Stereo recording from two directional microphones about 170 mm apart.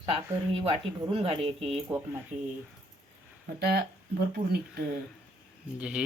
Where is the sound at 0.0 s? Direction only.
35° right (ahead or behind).